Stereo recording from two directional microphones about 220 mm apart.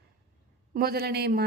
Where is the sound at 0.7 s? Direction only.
45° right (ahead or behind).